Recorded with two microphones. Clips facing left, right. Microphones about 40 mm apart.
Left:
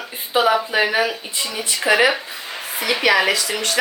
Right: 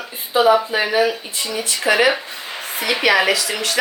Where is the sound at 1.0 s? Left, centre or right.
Centre.